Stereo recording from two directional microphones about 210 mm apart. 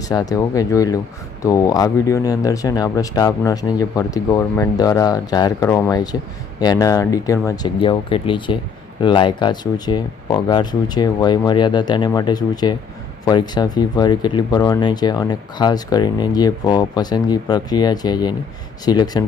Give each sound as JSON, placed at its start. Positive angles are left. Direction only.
{"t": 0.1, "sound": "speech", "side_deg": 20}